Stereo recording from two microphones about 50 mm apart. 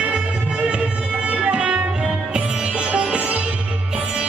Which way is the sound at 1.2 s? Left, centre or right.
Right.